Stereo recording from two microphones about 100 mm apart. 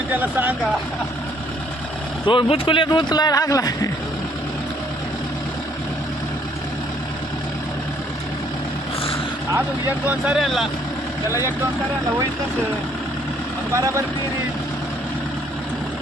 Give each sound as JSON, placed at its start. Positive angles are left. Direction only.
{"t": 0.1, "sound": "speech", "side_deg": -15}
{"t": 2.2, "sound": "a man's voice", "side_deg": 60}
{"t": 10.3, "sound": "speech", "side_deg": 0}
{"t": 13.7, "sound": "speech", "side_deg": -30}